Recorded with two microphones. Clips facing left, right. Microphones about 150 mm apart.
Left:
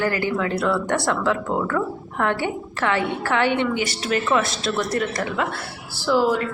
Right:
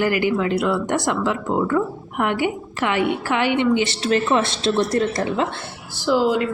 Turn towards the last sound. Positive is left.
turn(degrees=-15)  # may be behind; listen again after turning